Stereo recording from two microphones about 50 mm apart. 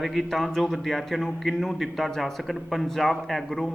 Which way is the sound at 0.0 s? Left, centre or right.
Centre.